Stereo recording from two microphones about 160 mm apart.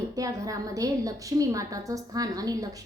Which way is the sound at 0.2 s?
20° right (ahead or behind).